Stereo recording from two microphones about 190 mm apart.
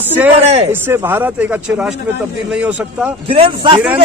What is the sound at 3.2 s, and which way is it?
Speech, 30° right (ahead or behind).